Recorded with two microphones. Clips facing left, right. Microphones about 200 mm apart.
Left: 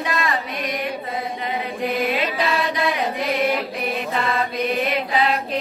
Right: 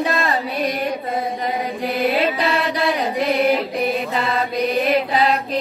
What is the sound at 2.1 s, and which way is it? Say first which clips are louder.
Mantra: right 3 dB; 30° right (ahead or behind).